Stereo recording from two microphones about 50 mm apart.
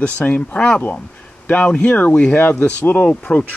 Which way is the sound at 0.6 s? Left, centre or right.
Centre.